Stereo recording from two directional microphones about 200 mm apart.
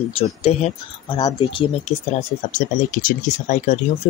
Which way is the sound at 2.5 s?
40° left (ahead or behind).